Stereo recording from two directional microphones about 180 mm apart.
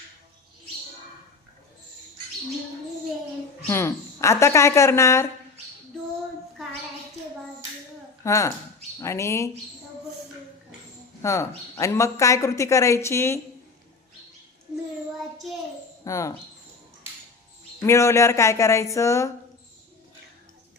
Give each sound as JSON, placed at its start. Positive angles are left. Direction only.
{"t": 3.7, "sound": "speech", "side_deg": 15}
{"t": 8.2, "sound": "speech", "side_deg": 15}
{"t": 11.2, "sound": "speech", "side_deg": 15}
{"t": 16.0, "sound": "speech", "side_deg": 15}
{"t": 17.8, "sound": "speech", "side_deg": 15}